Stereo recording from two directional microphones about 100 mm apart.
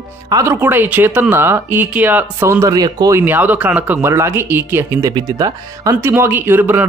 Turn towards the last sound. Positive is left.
turn(degrees=-20)  # may be behind; listen again after turning